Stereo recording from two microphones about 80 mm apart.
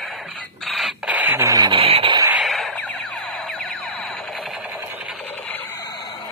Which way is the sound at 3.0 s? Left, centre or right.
Centre.